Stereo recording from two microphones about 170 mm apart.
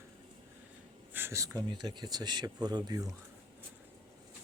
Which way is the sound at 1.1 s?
15° right (ahead or behind).